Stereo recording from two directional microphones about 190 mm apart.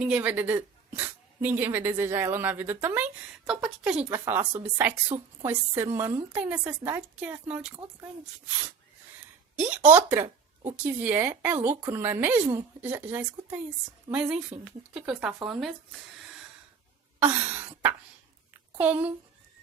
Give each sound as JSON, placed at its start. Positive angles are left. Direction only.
{"t": 0.0, "sound": "speech", "side_deg": -5}
{"t": 9.9, "sound": "speech", "side_deg": -10}
{"t": 10.2, "sound": "a sound", "side_deg": -35}
{"t": 10.8, "sound": "speech", "side_deg": -10}
{"t": 17.2, "sound": "a sound", "side_deg": -10}
{"t": 18.8, "sound": "speech", "side_deg": -10}